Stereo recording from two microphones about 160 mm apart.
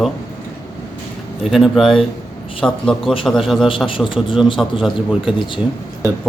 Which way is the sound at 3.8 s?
30° left (ahead or behind).